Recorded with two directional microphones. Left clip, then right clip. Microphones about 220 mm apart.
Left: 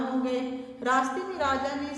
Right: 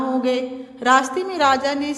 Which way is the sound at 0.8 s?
45° right (ahead or behind).